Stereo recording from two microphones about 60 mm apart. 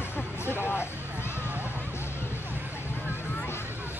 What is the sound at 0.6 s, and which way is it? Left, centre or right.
Speech, left.